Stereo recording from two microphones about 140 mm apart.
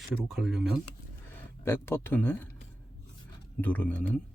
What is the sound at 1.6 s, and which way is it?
Speech, 15° left (ahead or behind).